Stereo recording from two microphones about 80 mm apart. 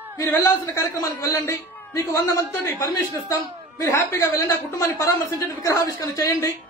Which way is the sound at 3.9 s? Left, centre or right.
Left.